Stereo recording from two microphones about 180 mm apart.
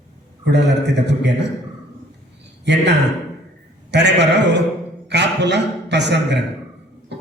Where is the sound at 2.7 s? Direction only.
70° right (ahead or behind).